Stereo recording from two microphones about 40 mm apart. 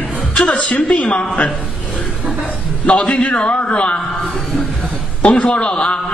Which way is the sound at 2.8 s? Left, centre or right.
Left.